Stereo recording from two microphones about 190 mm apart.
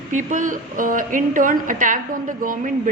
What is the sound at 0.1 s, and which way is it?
A woman's voice, 40° right (ahead or behind).